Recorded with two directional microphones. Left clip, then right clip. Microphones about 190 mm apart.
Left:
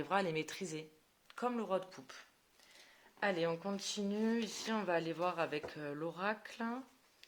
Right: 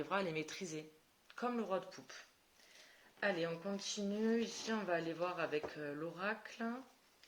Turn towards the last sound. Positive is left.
turn(degrees=55)  # may be behind; listen again after turning